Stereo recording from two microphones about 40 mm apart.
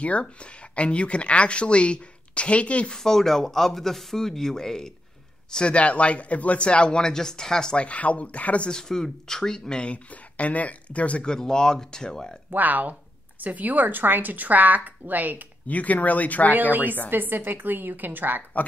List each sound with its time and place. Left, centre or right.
0.0 s speech: left
2.9 s speech: centre
5.5 s a man's voice: left
7.7 s speech: left
8.6 s speech: centre
9.8 s speech: left
11.2 s speech: centre
12.4 s speech: right
15.6 s speech: left
17.1 s a woman's voice: right